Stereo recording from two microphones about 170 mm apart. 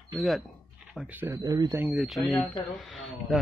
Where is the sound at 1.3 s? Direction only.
20° right (ahead or behind).